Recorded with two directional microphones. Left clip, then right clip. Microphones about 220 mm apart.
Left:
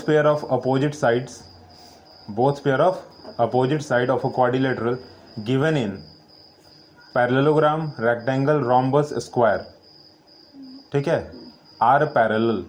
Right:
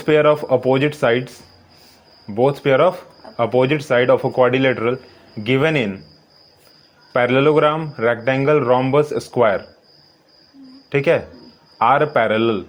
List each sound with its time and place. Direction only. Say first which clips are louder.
0.0 s a man's voice: right 4 dB; 45° right (ahead or behind)
2.3 s a man's voice: right 5 dB; 45° right (ahead or behind)
7.1 s a man's voice: right 4 dB; 45° right (ahead or behind)
10.9 s a man's voice: right 6 dB; 45° right (ahead or behind)